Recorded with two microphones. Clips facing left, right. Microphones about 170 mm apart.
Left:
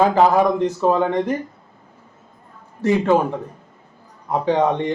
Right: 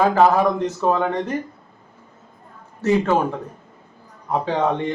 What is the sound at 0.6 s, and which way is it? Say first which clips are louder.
Speech: left 2 dB; 15° left (ahead or behind).